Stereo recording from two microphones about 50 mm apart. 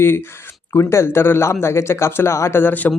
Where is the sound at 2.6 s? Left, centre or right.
Left.